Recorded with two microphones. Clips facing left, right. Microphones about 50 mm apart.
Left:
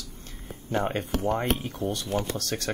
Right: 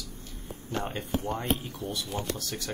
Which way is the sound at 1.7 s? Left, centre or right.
Left.